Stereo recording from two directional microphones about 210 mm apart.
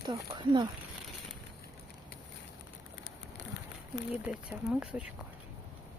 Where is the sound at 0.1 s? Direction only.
20° right (ahead or behind).